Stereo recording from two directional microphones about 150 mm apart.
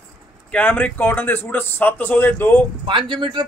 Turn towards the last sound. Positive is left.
turn(degrees=-30)  # may be behind; listen again after turning